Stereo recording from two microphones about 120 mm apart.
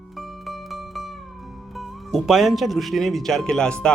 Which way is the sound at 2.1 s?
Centre (ahead or behind).